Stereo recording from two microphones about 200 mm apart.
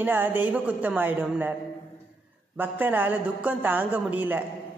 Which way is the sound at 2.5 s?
10° right (ahead or behind).